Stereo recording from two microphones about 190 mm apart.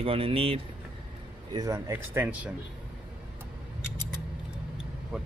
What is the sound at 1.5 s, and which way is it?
Speech, 15° right (ahead or behind).